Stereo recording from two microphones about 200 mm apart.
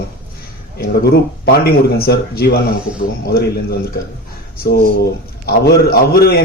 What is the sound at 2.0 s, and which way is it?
Speech, 50° left (ahead or behind).